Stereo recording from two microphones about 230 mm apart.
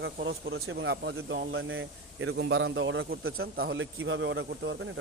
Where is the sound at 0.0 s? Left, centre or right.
Right.